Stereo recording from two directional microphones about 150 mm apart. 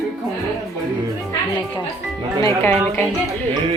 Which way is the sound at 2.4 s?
15° left (ahead or behind).